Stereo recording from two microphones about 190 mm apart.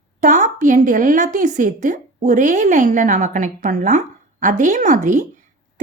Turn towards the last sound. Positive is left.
turn(degrees=-45)  # may be behind; listen again after turning